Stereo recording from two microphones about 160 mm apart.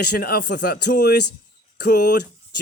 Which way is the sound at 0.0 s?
75° left (ahead or behind).